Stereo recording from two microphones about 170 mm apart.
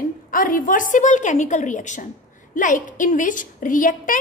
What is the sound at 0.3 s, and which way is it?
A woman's voice, 55° left (ahead or behind).